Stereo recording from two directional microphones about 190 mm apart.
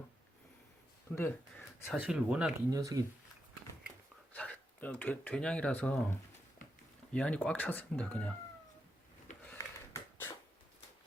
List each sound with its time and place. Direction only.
1.1 s speech: 10° left (ahead or behind)
1.9 s speech: 5° right (ahead or behind)
2.6 s speech: 20° right (ahead or behind)
4.3 s speech: 5° left (ahead or behind)
9.4 s wheeze: 10° left (ahead or behind)